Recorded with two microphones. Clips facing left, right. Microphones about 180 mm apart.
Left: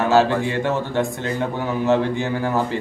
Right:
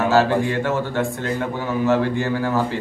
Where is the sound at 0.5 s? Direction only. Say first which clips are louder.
Even; 15° left (ahead or behind).